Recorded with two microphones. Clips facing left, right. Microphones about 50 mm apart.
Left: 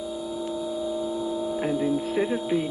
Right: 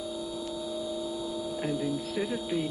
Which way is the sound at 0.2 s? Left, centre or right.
Left.